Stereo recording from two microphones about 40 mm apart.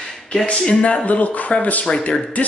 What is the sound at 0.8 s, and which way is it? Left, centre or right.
Speech, left.